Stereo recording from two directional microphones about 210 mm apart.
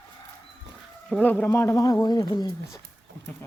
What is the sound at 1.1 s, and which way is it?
Speech, 5° left (ahead or behind).